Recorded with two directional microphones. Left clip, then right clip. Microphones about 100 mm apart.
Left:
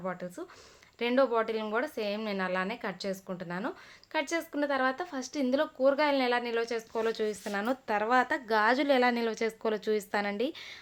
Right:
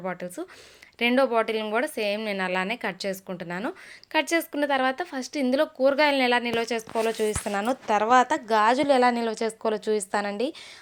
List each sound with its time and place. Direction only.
0.0 s speech: 45° right (ahead or behind)
6.6 s speech: 55° right (ahead or behind)
6.9 s speech: 30° right (ahead or behind)
8.4 s a woman's voice: 10° right (ahead or behind)